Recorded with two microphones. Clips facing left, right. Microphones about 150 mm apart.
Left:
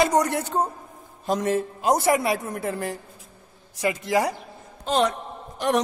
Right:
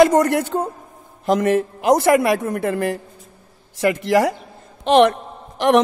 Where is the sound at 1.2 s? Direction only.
90° right; by 3.0 s 70° right (ahead or behind).